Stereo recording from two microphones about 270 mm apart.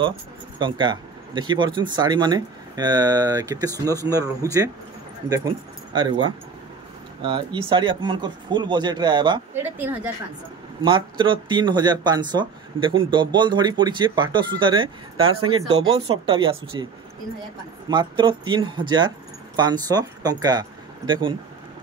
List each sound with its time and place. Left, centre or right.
0.6 s speech: centre
5.9 s speech: centre
17.8 s speech: centre